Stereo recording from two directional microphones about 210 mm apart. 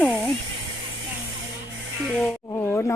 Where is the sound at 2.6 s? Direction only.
10° left (ahead or behind).